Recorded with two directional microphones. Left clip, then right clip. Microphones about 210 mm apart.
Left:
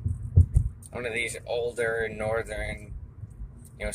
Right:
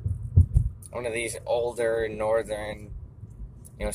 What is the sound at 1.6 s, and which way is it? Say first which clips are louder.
Speech: even; 15° right (ahead or behind).